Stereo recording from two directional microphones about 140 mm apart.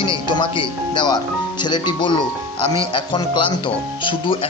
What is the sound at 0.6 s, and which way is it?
Speech, 30° left (ahead or behind).